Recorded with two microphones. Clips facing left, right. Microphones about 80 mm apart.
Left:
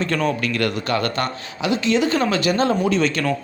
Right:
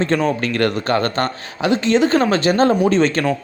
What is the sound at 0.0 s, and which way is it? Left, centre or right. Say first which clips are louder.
Speech: right 3 dB; right.